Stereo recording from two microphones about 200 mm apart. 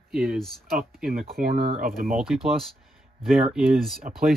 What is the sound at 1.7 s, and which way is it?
Speech, 45° right (ahead or behind).